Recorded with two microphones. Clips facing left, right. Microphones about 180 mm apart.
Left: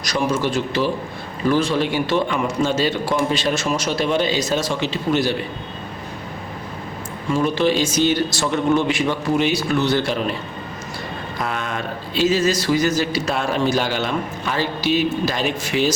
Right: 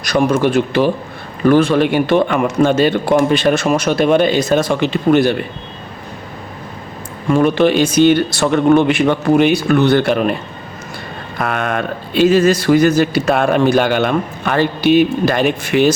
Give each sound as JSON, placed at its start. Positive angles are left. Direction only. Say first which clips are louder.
{"t": 0.0, "sound": "speech", "louder": "right 7 dB", "side_deg": -55}
{"t": 7.3, "sound": "speech", "louder": "right 6 dB", "side_deg": -60}
{"t": 11.3, "sound": "speech", "louder": "right 8 dB", "side_deg": -60}